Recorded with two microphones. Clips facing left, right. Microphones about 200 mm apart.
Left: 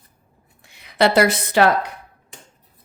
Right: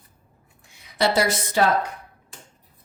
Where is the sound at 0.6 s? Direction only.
65° left (ahead or behind).